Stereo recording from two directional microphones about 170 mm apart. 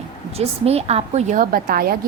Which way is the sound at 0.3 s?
35° right (ahead or behind).